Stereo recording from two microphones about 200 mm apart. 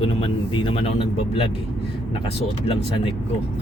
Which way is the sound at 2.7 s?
30° left (ahead or behind).